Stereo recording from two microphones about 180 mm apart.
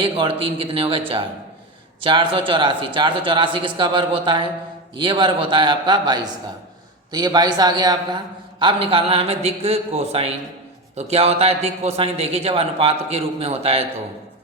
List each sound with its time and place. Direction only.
0.0 s a man's voice: 30° right (ahead or behind)